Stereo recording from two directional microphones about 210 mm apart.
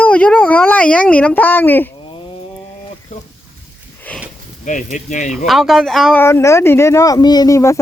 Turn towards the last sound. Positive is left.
turn(degrees=15)  # may be behind; listen again after turning